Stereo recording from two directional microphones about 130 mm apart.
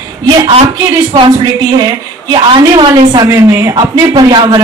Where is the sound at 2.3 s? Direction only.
35° right (ahead or behind).